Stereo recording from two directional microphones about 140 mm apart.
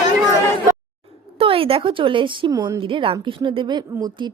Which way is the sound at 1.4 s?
40° right (ahead or behind).